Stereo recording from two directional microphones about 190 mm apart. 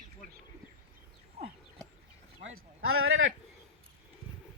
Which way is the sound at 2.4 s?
90° right.